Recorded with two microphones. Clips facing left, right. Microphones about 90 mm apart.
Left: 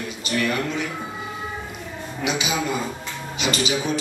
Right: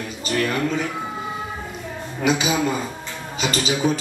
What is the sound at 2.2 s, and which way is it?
Music, 40° right (ahead or behind).